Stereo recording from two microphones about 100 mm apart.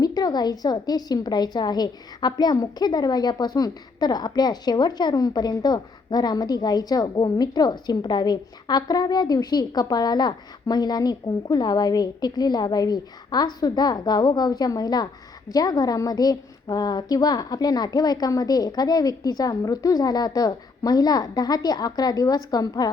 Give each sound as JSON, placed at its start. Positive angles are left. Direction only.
{"t": 0.0, "sound": "a woman's voice", "side_deg": 40}